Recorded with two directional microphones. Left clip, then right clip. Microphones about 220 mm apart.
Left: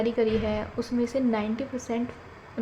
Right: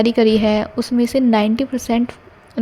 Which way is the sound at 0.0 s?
45° right (ahead or behind).